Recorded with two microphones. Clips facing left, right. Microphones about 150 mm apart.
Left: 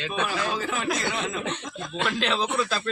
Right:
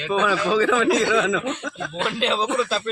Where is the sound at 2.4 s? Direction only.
90° right.